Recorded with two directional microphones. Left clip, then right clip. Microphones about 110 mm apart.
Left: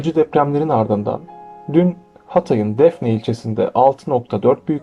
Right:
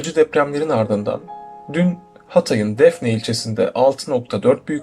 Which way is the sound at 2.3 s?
30° left (ahead or behind).